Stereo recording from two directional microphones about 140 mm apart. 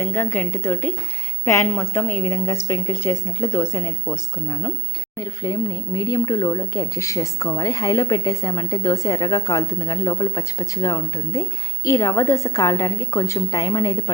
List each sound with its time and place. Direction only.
0.0 s speech: 20° left (ahead or behind)